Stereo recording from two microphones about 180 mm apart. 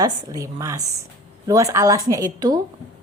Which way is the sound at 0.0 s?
20° right (ahead or behind).